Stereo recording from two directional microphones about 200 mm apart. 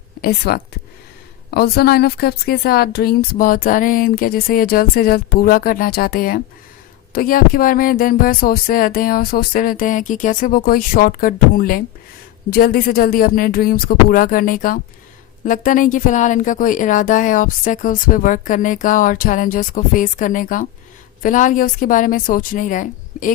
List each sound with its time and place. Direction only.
0.2 s a woman's voice: 50° left (ahead or behind)